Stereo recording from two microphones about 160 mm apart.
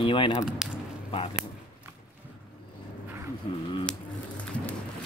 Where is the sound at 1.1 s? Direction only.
35° left (ahead or behind).